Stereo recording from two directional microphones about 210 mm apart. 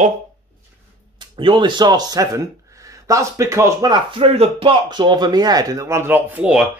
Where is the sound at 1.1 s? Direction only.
20° right (ahead or behind); by 6.7 s 5° right (ahead or behind).